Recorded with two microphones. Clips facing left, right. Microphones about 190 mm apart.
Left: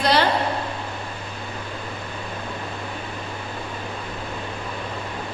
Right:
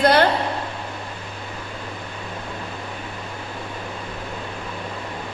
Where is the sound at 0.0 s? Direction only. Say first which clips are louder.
Right 4 dB; 55° right (ahead or behind).